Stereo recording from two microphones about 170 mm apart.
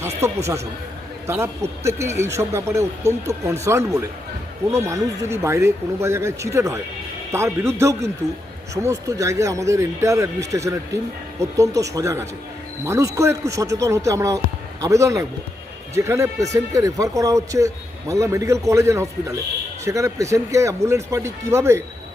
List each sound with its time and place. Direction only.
1.3 s speech: 15° right (ahead or behind)